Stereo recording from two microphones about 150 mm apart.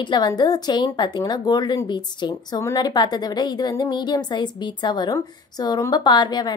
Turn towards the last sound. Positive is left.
turn(degrees=30)  # may be behind; listen again after turning